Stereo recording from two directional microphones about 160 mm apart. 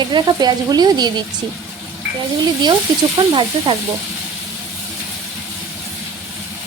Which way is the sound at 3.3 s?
30° right (ahead or behind).